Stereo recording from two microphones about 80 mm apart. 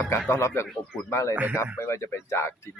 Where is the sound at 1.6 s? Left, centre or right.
Left.